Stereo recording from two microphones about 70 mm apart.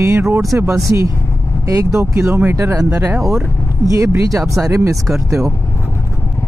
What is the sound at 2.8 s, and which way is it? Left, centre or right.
Speech, right.